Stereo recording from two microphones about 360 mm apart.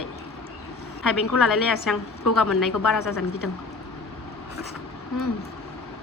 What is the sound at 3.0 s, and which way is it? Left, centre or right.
Speech, left.